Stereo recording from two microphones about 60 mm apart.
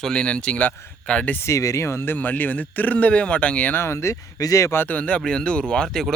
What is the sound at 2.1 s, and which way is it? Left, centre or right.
Speech, left.